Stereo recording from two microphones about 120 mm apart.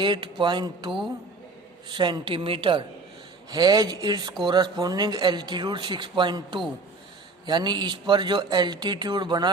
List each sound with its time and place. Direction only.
0.0 s a woman's voice: 40° right (ahead or behind)
3.5 s speech: 35° right (ahead or behind)